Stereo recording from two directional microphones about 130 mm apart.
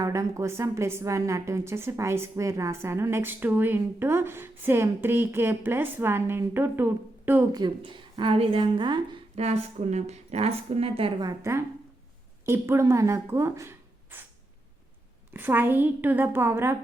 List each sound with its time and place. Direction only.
0.0 s a woman's voice: 25° right (ahead or behind)
7.5 s a woman's voice: 35° right (ahead or behind)
9.3 s speech: 55° right (ahead or behind)
11.2 s a woman's voice: 25° right (ahead or behind)
15.3 s speech: 15° right (ahead or behind)